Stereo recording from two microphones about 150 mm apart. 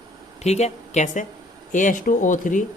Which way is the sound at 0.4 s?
45° left (ahead or behind).